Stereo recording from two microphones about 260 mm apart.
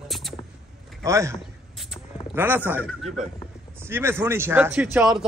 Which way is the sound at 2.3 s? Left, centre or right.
Centre.